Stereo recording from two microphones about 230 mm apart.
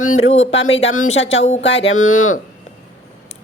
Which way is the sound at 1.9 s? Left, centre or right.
Left.